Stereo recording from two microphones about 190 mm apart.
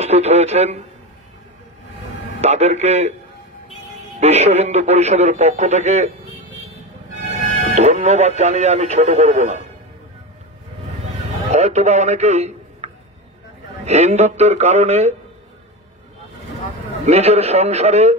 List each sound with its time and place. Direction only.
0.0 s speech: 35° right (ahead or behind)
2.4 s speech: 35° right (ahead or behind)
4.2 s speech: 35° right (ahead or behind)
7.5 s speech: 35° right (ahead or behind)
11.5 s a man's voice: 35° right (ahead or behind)
17.0 s speech: 35° right (ahead or behind)